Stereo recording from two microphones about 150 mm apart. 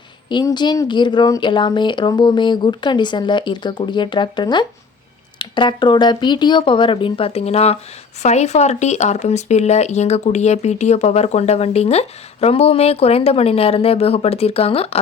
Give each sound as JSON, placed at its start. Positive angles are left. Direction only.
{"t": 0.3, "sound": "speech", "side_deg": 30}